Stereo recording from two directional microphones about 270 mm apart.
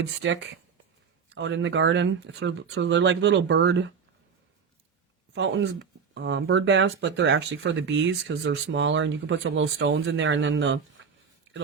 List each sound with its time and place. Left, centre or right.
0.2 s speech: right
5.3 s speech: right